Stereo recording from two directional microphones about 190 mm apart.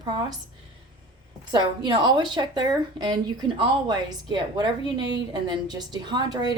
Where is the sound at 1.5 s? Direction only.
25° right (ahead or behind).